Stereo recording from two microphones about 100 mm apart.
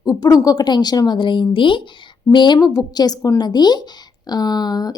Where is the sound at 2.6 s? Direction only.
40° left (ahead or behind).